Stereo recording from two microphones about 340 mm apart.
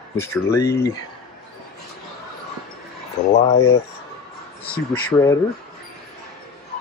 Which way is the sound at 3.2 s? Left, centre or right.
Left.